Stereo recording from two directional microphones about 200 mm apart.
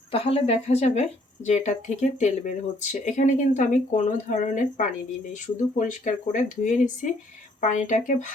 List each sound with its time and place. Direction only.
0.1 s speech: 30° left (ahead or behind)